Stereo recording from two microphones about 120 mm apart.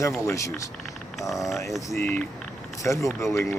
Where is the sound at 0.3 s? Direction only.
25° left (ahead or behind).